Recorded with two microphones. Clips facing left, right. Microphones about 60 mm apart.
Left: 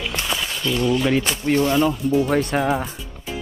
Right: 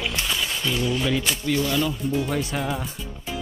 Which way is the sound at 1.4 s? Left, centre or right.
Left.